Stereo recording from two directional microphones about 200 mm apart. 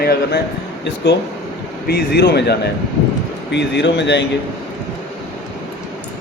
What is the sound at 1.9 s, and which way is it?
A man's voice, 50° left (ahead or behind).